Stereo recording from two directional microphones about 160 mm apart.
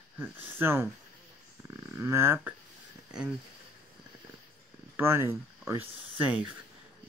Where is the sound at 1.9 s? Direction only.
15° right (ahead or behind).